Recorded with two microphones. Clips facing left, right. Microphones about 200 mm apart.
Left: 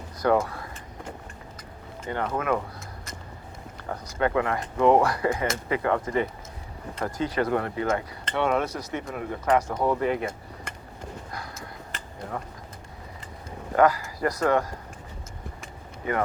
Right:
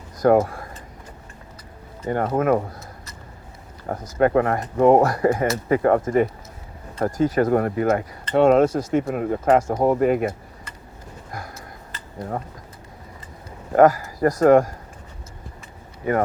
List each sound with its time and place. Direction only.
0.2 s speech: 45° right (ahead or behind)
2.0 s speech: 45° right (ahead or behind)
3.8 s speech: 45° right (ahead or behind)
11.3 s a sound: 45° right (ahead or behind)
13.7 s speech: 45° right (ahead or behind)